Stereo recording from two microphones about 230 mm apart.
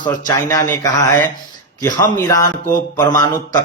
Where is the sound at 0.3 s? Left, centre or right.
Centre.